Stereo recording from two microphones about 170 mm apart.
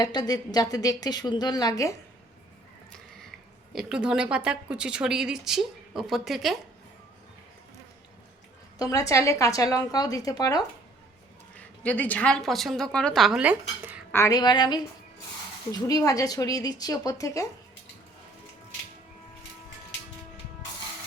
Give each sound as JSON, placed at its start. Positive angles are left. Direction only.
{"t": 0.0, "sound": "a woman's voice", "side_deg": 25}
{"t": 2.9, "sound": "a sound", "side_deg": 0}
{"t": 3.7, "sound": "speech", "side_deg": -5}
{"t": 8.8, "sound": "a woman's voice", "side_deg": 20}
{"t": 11.5, "sound": "speech", "side_deg": 10}
{"t": 14.1, "sound": "a woman's voice", "side_deg": 15}